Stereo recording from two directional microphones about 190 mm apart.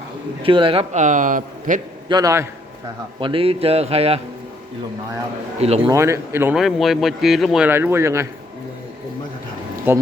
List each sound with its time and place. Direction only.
0.4 s speech: 25° right (ahead or behind); by 1.8 s 45° right (ahead or behind)
2.0 s speech: 20° right (ahead or behind)
3.2 s speech: 25° right (ahead or behind)
5.5 s speech: 35° right (ahead or behind)
5.9 s speech: 15° right (ahead or behind)
6.6 s speech: centre (ahead or behind)
7.7 s speech: 10° right (ahead or behind)
9.9 s speech: 10° right (ahead or behind)